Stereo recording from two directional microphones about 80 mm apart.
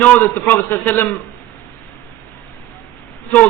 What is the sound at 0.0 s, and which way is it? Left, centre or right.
A man's voice, left.